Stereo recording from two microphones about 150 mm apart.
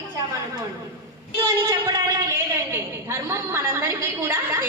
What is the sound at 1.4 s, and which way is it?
A woman's voice, 20° right (ahead or behind).